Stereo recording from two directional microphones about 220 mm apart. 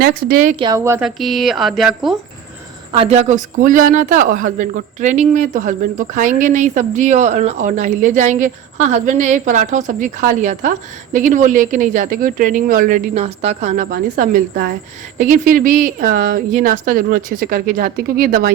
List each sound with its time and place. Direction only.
0.0 s speech: 40° right (ahead or behind)
0.6 s speech: 15° right (ahead or behind)
3.0 s speech: 30° right (ahead or behind)